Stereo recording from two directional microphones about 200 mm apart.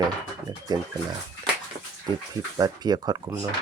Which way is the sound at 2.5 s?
20° right (ahead or behind).